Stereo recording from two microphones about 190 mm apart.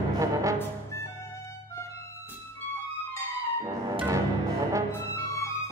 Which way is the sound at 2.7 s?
25° left (ahead or behind).